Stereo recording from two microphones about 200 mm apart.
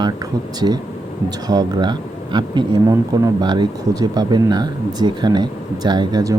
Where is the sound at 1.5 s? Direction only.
20° right (ahead or behind).